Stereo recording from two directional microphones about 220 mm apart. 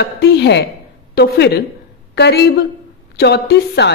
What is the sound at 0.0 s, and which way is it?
A woman's voice, 50° left (ahead or behind).